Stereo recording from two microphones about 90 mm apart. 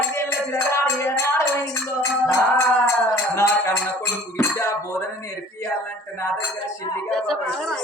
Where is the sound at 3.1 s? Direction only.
30° left (ahead or behind).